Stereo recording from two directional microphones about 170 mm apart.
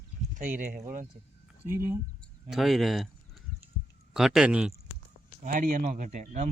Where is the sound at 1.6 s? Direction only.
15° right (ahead or behind).